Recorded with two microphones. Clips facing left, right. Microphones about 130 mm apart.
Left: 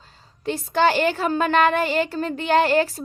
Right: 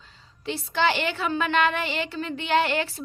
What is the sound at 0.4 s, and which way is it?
A woman's voice, 45° left (ahead or behind).